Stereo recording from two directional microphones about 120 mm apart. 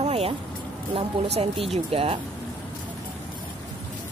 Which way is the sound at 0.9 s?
60° right (ahead or behind).